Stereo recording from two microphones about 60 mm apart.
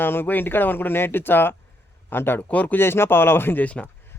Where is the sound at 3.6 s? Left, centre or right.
Left.